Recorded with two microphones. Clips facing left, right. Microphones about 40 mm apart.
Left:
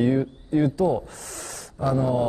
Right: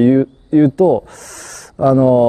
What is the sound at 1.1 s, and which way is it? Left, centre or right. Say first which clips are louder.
Speech: right 4 dB; right.